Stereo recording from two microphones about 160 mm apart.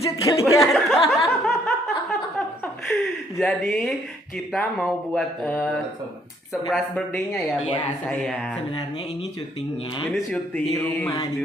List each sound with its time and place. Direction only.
0.0 s speech: 20° left (ahead or behind)
0.6 s speech: centre (ahead or behind)
1.2 s laughter: centre (ahead or behind)
2.8 s speech: centre (ahead or behind)
10.0 s speech: centre (ahead or behind)
10.5 s a sound: 10° left (ahead or behind)